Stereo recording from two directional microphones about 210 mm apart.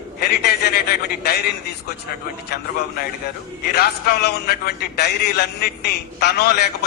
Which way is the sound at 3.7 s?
50° left (ahead or behind).